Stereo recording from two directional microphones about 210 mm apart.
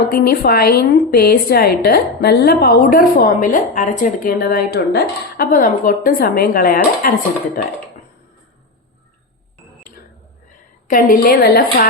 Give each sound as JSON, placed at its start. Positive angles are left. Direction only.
{"t": 0.1, "sound": "a woman's voice", "side_deg": 45}
{"t": 10.8, "sound": "a woman's voice", "side_deg": 40}